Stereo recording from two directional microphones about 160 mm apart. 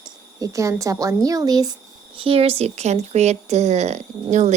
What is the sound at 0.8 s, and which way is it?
Speech, 20° right (ahead or behind).